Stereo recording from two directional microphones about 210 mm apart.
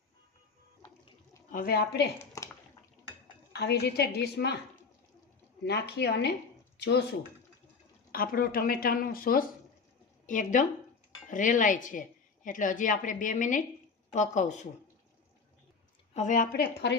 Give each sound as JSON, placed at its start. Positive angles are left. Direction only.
{"t": 1.5, "sound": "a woman's voice", "side_deg": 45}
{"t": 2.4, "sound": "bathtub", "side_deg": 15}
{"t": 3.5, "sound": "a woman's voice", "side_deg": 50}
{"t": 5.6, "sound": "a woman's voice", "side_deg": 50}
{"t": 8.1, "sound": "a woman's voice", "side_deg": 45}
{"t": 16.1, "sound": "a woman's voice", "side_deg": 35}